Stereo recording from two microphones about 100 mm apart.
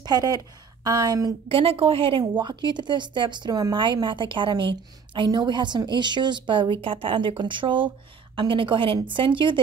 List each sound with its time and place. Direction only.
0.0 s speech: 40° right (ahead or behind)
1.5 s a woman's voice: 65° right (ahead or behind)